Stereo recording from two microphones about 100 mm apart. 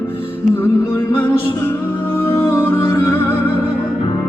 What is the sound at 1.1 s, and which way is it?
Music, 15° left (ahead or behind).